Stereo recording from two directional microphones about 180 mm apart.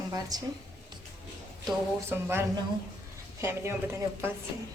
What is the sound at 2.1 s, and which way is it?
Speech, 15° right (ahead or behind).